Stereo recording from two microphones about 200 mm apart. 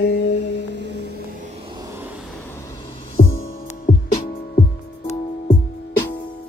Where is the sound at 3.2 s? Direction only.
45° left (ahead or behind).